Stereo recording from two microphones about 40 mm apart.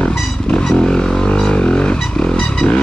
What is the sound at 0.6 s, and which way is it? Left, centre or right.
Music, centre.